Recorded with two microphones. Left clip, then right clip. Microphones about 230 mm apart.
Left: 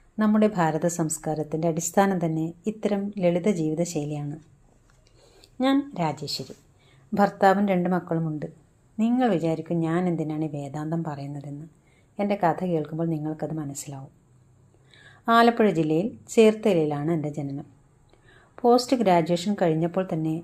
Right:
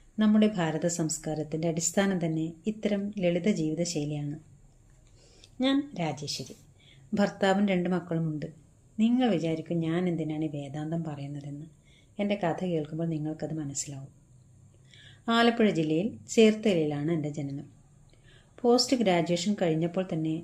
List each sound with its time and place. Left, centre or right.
0.2 s a woman's voice: centre
5.4 s a woman's voice: centre